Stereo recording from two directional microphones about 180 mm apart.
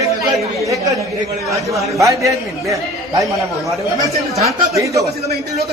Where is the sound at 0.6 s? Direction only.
15° right (ahead or behind).